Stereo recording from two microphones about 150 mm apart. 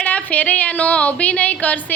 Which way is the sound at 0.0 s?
10° left (ahead or behind).